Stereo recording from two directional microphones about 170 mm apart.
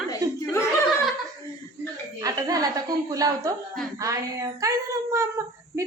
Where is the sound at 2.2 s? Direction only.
20° right (ahead or behind).